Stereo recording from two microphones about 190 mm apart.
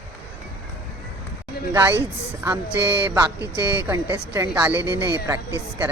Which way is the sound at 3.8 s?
10° right (ahead or behind).